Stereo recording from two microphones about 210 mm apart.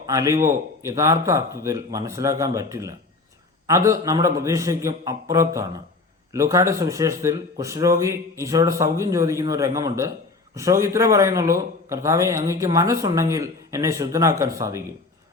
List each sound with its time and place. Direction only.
0.0 s a man's voice: 15° right (ahead or behind)